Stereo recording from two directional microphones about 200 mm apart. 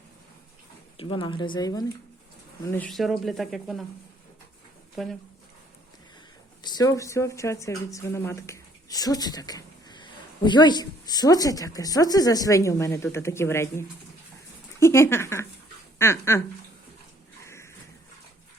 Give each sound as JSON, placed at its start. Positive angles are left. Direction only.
{"t": 0.9, "sound": "speech", "side_deg": 25}
{"t": 2.6, "sound": "speech", "side_deg": 10}
{"t": 5.0, "sound": "speech", "side_deg": 0}
{"t": 6.6, "sound": "speech", "side_deg": 20}
{"t": 17.4, "sound": "a sound", "side_deg": 15}